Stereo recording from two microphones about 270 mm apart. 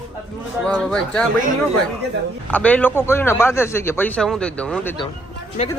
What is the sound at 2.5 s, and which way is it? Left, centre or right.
A man's voice, centre.